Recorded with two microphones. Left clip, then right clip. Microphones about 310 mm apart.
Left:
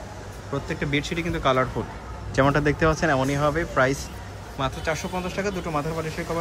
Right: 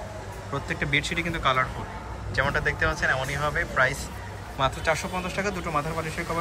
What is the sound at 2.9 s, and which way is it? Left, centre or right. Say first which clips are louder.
Speech: left 3 dB; left.